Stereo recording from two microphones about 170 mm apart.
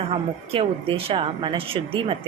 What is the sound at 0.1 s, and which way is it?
A woman's voice, 35° right (ahead or behind).